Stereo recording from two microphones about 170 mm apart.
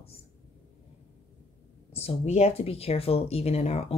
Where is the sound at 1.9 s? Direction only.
35° left (ahead or behind).